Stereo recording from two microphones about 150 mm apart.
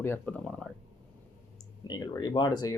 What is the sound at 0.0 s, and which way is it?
Speech, 10° left (ahead or behind).